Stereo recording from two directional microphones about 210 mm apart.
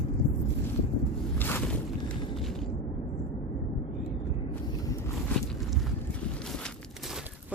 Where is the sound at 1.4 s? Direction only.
10° left (ahead or behind).